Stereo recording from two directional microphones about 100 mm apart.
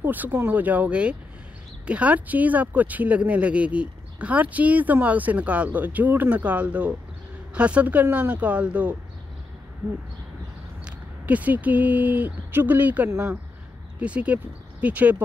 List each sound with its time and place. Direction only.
0.0 s speech: 15° right (ahead or behind)
10.9 s speech: 15° right (ahead or behind)